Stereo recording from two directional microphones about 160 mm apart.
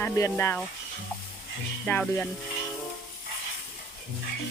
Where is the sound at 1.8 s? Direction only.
10° left (ahead or behind).